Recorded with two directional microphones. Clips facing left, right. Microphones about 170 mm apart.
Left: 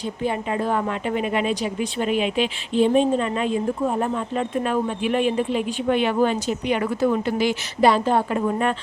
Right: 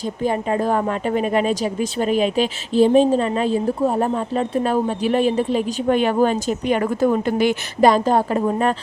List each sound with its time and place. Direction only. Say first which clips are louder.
0.2 s a woman's voice: right 4 dB; 40° right (ahead or behind)